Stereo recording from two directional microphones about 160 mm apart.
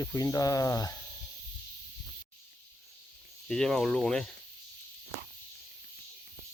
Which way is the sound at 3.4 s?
5° left (ahead or behind).